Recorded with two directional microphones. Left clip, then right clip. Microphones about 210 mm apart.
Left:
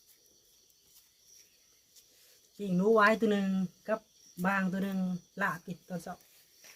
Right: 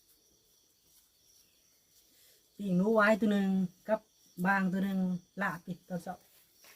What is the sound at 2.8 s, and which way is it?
Speech, 15° left (ahead or behind).